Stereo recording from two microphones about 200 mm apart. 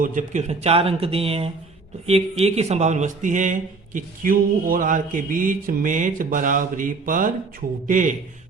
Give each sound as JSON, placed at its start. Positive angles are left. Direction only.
{"t": 0.0, "sound": "speech", "side_deg": -40}